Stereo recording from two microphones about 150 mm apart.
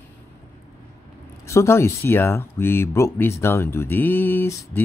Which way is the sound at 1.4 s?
20° left (ahead or behind).